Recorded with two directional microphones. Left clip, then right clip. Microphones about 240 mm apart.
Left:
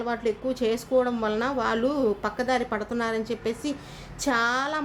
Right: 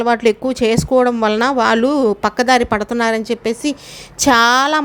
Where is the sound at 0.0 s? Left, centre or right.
Right.